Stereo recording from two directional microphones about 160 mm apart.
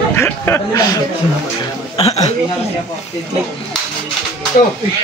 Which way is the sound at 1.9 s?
40° left (ahead or behind).